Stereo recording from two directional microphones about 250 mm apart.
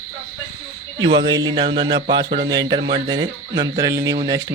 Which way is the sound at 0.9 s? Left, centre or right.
Centre.